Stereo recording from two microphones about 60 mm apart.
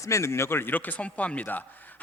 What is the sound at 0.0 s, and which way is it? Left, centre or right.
A man's voice, left.